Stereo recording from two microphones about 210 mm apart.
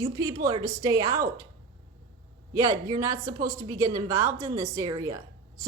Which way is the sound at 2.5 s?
15° right (ahead or behind).